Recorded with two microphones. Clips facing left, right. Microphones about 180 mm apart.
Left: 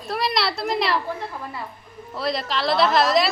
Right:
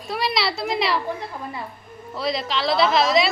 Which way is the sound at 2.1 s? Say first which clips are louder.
Even; centre (ahead or behind).